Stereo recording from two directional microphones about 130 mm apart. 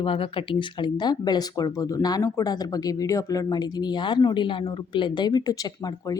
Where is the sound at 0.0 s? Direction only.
45° left (ahead or behind).